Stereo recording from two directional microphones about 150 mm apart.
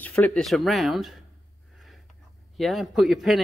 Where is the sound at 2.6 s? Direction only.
Centre (ahead or behind).